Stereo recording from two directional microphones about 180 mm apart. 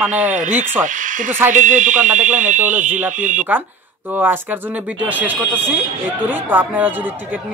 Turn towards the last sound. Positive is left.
turn(degrees=-10)  # may be behind; listen again after turning